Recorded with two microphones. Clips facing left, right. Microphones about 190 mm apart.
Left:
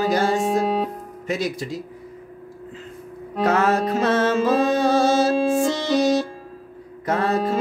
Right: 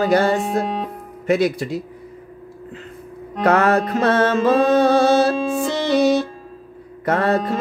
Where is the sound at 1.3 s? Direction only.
60° right (ahead or behind).